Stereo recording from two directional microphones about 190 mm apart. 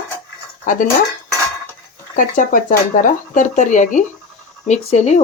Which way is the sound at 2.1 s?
45° left (ahead or behind).